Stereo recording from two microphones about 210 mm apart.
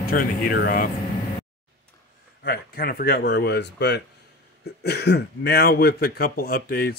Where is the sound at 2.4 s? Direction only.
50° left (ahead or behind).